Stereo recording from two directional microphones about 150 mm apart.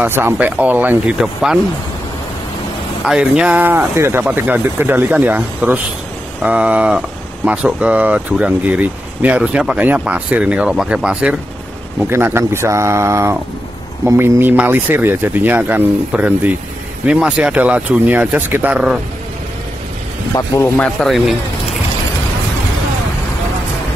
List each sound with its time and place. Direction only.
0.0 s speech: 15° right (ahead or behind)
3.1 s speech: 5° right (ahead or behind)
20.3 s speech: 15° left (ahead or behind)